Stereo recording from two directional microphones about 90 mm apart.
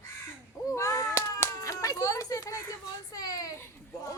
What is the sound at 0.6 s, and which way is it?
Speech, 35° left (ahead or behind).